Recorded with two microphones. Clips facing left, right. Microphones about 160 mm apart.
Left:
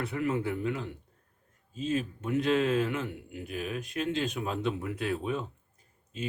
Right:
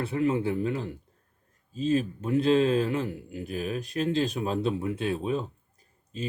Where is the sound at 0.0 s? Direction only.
30° right (ahead or behind).